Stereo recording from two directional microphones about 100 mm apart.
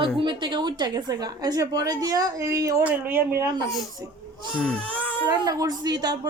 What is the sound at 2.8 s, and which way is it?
Speech, 20° right (ahead or behind).